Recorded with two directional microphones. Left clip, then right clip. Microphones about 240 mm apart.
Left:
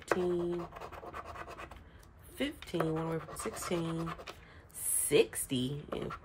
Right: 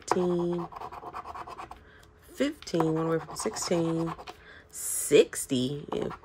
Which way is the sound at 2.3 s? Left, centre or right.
Right.